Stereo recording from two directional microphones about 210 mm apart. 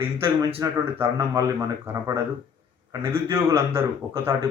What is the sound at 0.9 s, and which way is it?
Speech, 10° right (ahead or behind).